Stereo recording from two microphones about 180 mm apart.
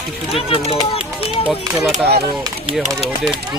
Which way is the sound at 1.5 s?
10° right (ahead or behind).